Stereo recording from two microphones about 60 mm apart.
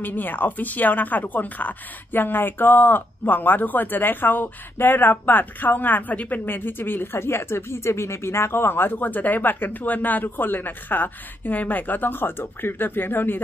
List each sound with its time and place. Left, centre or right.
0.0 s a woman's voice: left